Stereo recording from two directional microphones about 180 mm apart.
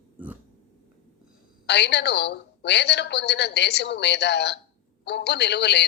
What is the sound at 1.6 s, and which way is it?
A woman's voice, 70° left (ahead or behind).